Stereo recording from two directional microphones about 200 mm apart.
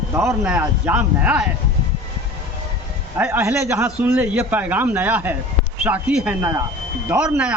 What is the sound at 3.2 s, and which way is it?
A man's voice, 10° right (ahead or behind).